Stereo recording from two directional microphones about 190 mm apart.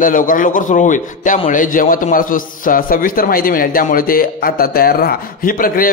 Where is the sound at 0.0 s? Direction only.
45° left (ahead or behind).